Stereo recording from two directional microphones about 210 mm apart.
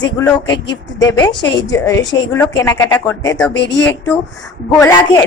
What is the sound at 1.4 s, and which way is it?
Speech, 55° left (ahead or behind).